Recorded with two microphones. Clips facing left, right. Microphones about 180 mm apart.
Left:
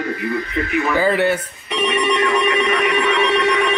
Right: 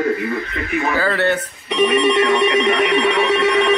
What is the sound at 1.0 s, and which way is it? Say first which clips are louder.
Speech: left 3 dB; 15° left (ahead or behind).